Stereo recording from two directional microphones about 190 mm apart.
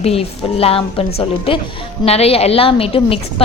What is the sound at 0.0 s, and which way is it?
A woman's voice, 30° left (ahead or behind).